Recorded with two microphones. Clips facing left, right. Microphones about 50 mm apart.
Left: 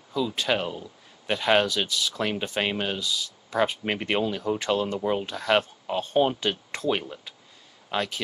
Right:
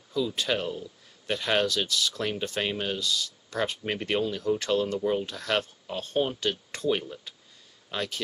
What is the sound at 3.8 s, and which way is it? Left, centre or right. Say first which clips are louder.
Speech: left 2 dB; left.